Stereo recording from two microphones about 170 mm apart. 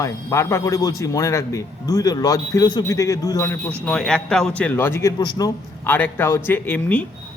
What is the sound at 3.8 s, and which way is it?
A man's voice, 5° left (ahead or behind).